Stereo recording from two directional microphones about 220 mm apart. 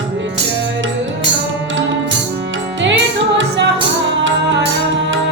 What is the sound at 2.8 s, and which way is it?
Music, 55° right (ahead or behind).